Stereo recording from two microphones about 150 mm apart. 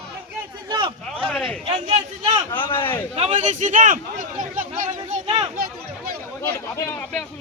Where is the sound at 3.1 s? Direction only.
45° right (ahead or behind).